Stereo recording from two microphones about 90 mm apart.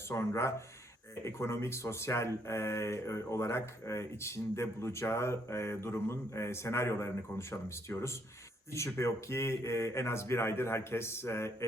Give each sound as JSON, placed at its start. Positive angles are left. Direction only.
{"t": 0.1, "sound": "speech", "side_deg": 30}